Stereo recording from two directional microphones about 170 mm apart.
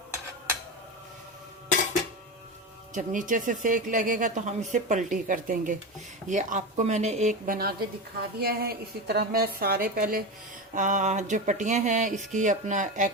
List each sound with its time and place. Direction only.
2.9 s a woman's voice: 50° right (ahead or behind)
10.8 s speech: 45° right (ahead or behind)